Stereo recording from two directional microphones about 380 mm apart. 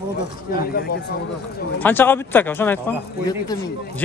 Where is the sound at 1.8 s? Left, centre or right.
Centre.